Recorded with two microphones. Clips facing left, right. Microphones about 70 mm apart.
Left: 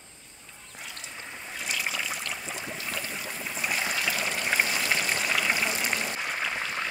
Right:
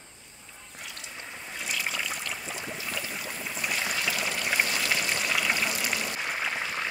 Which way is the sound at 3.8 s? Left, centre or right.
Centre.